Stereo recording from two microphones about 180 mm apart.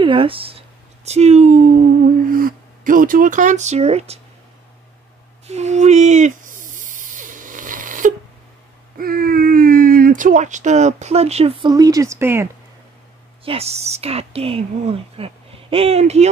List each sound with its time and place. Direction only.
0.0 s speech: 30° right (ahead or behind)
2.2 s speech: 50° right (ahead or behind); by 4.2 s 35° right (ahead or behind)
5.5 s snake: 40° right (ahead or behind)
8.9 s speech: 55° right (ahead or behind); by 12.4 s 15° right (ahead or behind)
13.5 s a woman's voice: 35° right (ahead or behind)